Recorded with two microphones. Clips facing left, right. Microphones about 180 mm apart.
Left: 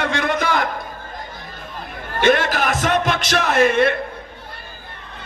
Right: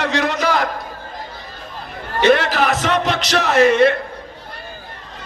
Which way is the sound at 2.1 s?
50° left (ahead or behind).